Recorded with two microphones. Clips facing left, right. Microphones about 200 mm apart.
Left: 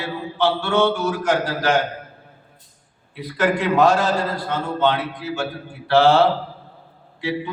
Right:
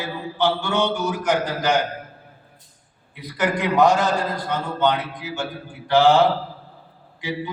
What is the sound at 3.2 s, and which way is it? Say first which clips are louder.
A man's voice: left 3 dB; 15° right (ahead or behind).